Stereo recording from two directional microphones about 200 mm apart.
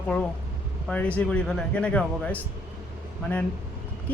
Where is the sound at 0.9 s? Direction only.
5° left (ahead or behind).